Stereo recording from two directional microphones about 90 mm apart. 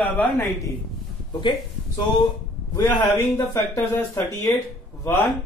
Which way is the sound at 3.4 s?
30° left (ahead or behind).